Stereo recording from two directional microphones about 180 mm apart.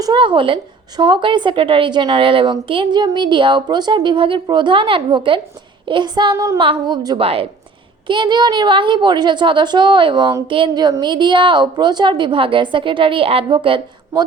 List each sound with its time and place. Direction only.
0.0 s a woman's voice: 25° right (ahead or behind)